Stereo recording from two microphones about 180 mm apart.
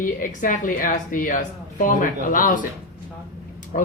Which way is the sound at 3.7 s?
45° left (ahead or behind).